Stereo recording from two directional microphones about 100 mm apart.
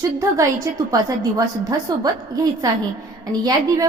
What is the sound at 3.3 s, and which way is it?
Speech, 40° right (ahead or behind).